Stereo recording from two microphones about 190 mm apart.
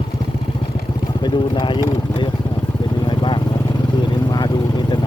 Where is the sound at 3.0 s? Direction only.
25° left (ahead or behind).